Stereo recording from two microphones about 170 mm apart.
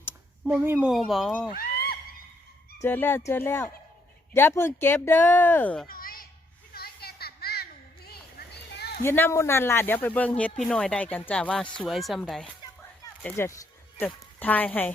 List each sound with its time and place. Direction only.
0.4 s speech: 10° right (ahead or behind)
1.5 s neigh: 65° left (ahead or behind)
2.8 s speech: 10° left (ahead or behind)
5.9 s a sound: 60° left (ahead or behind)
9.0 s speech: 15° left (ahead or behind)
13.3 s speech: 15° left (ahead or behind)